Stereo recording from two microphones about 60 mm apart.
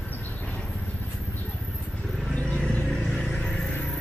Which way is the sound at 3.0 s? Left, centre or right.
Centre.